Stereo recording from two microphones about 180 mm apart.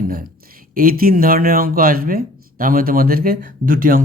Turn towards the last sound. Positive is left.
turn(degrees=-50)  # may be behind; listen again after turning